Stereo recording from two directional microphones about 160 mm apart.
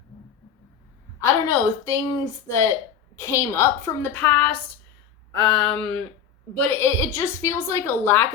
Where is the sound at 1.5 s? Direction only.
15° left (ahead or behind).